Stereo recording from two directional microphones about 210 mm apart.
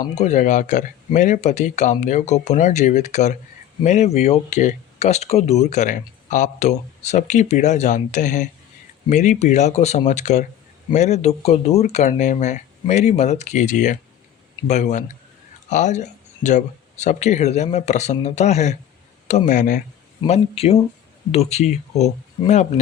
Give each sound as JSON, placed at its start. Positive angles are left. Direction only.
{"t": 0.0, "sound": "speech", "side_deg": 35}